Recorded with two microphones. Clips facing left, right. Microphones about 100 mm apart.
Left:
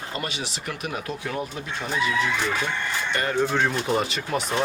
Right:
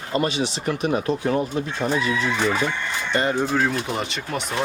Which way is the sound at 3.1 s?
20° right (ahead or behind).